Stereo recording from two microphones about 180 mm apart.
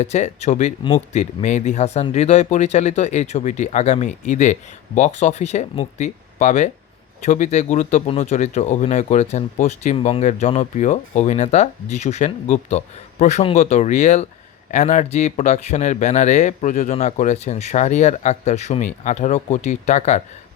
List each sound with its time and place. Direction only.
0.0 s speech: 40° left (ahead or behind)